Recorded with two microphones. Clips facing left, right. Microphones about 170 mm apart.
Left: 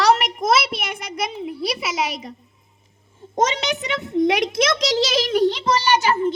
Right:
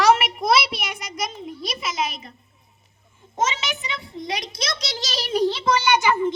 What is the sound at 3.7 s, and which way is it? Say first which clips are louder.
Speech: left 7 dB; 75° left (ahead or behind).